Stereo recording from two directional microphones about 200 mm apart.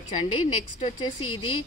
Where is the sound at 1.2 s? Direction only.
90° left.